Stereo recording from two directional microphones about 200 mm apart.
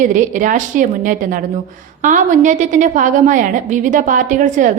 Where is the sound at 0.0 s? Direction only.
40° right (ahead or behind).